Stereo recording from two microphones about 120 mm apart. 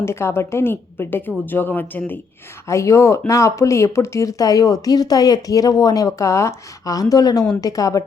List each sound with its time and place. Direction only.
0.0 s speech: 20° left (ahead or behind)